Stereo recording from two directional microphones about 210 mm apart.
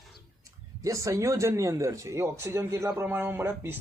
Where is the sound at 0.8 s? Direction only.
15° right (ahead or behind).